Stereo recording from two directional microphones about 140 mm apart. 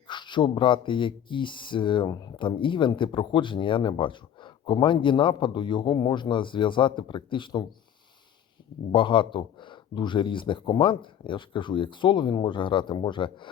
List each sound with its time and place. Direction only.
0.1 s speech: 35° left (ahead or behind)
8.9 s speech: 35° left (ahead or behind)